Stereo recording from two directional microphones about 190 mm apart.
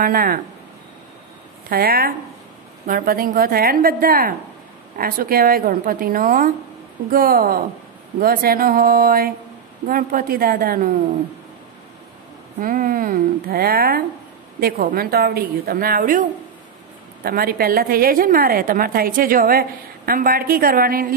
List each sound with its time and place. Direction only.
0.0 s a woman's voice: 50° right (ahead or behind)
1.7 s a woman's voice: 50° right (ahead or behind)
12.5 s a woman's voice: 45° right (ahead or behind)